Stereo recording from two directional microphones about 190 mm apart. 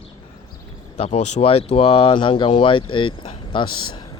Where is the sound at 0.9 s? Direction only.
35° left (ahead or behind).